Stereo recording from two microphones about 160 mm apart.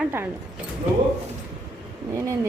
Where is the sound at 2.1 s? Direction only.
20° right (ahead or behind).